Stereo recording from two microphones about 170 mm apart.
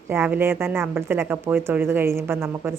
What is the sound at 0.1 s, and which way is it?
Speech, 10° right (ahead or behind).